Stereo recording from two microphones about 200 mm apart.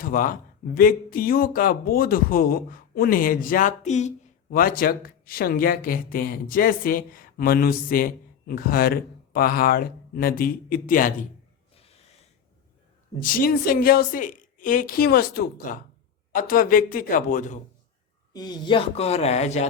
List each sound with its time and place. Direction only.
0.0 s speech: 45° left (ahead or behind)
13.2 s speech: 45° left (ahead or behind)
18.3 s speech: 20° left (ahead or behind)